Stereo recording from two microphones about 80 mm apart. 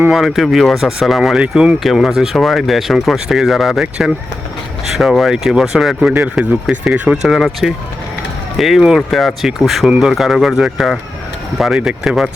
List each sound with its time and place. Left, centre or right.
0.1 s speech: centre
1.4 s speech: centre
1.8 s speech: centre
6.2 s speech: centre
7.2 s speech: centre